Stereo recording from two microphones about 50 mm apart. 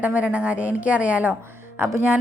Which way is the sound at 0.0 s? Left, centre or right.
Right.